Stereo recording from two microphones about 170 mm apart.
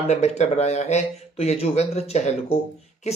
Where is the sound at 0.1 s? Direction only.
40° left (ahead or behind).